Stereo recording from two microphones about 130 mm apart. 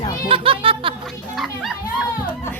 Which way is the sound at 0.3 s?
45° right (ahead or behind).